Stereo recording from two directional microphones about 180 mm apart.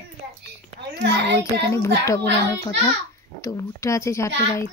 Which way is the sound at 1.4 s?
15° left (ahead or behind).